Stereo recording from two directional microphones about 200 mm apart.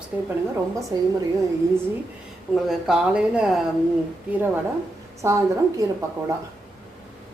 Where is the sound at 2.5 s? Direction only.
Centre (ahead or behind).